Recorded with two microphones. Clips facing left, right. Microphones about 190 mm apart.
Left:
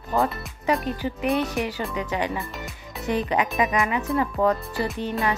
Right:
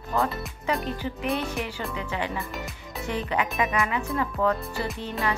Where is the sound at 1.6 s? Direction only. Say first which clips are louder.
Left 4 dB; 15° left (ahead or behind).